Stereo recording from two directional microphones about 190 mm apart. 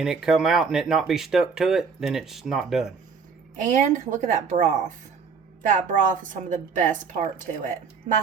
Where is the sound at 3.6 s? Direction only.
40° right (ahead or behind).